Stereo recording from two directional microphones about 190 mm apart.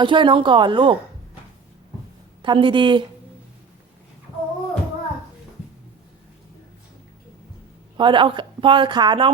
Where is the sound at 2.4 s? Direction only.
25° right (ahead or behind).